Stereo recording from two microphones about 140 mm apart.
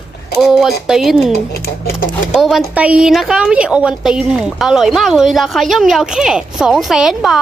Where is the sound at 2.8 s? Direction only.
10° right (ahead or behind).